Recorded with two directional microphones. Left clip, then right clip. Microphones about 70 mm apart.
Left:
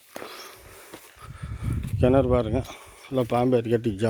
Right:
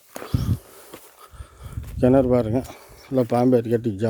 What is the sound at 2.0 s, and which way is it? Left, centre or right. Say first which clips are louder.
Speech: right 3 dB; right.